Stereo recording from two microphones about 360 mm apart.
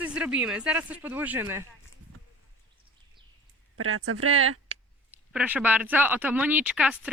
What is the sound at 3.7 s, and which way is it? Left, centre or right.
Speech, right.